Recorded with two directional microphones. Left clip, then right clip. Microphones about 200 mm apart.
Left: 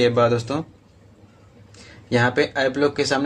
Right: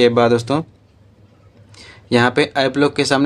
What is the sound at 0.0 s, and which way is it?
Speech, 35° right (ahead or behind).